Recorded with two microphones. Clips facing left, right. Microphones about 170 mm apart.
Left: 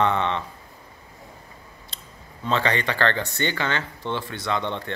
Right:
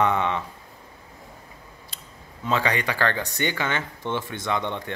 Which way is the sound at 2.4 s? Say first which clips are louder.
Left 1 dB; 10° right (ahead or behind).